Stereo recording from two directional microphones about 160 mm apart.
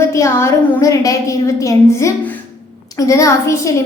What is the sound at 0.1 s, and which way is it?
A woman's voice, 20° left (ahead or behind).